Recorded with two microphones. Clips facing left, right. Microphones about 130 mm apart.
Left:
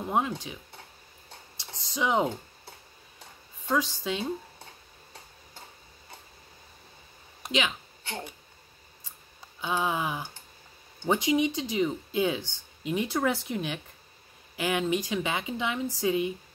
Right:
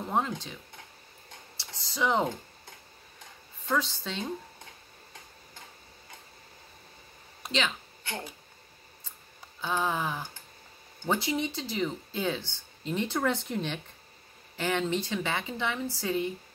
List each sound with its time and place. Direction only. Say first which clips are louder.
0.0 s stir: left 2 dB; 10° left (ahead or behind)
1.6 s a sound: even; 20° left (ahead or behind)
3.7 s speech: left 2 dB; 15° left (ahead or behind)
7.4 s speech: left 2 dB; 15° left (ahead or behind)
9.6 s speech: left 1 dB; 15° left (ahead or behind)